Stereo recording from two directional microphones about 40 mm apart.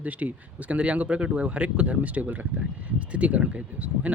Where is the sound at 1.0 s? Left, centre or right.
Right.